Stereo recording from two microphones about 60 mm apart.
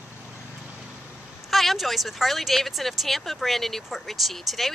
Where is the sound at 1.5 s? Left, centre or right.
Centre.